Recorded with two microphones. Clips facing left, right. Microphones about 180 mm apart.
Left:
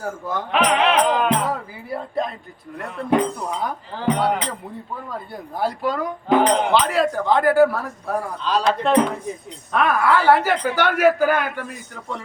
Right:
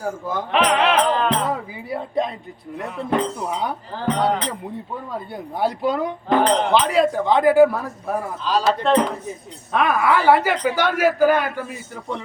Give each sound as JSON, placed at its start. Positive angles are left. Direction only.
{"t": 0.0, "sound": "speech", "side_deg": -10}
{"t": 1.0, "sound": "speech", "side_deg": 10}
{"t": 1.9, "sound": "speech", "side_deg": -20}
{"t": 2.7, "sound": "speech", "side_deg": 0}
{"t": 3.1, "sound": "speech", "side_deg": 10}
{"t": 5.5, "sound": "speech", "side_deg": -20}
{"t": 6.2, "sound": "speech", "side_deg": 15}
{"t": 6.9, "sound": "speech", "side_deg": -20}
{"t": 8.4, "sound": "speech", "side_deg": 0}
{"t": 10.0, "sound": "speech", "side_deg": -15}